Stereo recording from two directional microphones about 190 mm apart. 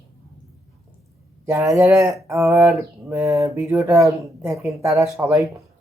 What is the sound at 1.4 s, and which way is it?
Speech, 15° right (ahead or behind).